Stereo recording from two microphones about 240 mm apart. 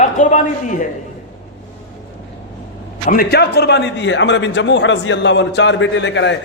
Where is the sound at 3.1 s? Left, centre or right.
Left.